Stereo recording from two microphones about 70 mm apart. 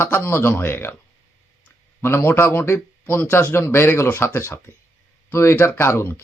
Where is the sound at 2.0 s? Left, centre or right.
Left.